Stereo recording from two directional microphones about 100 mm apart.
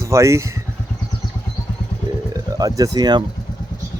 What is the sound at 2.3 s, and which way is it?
Speech, 35° right (ahead or behind).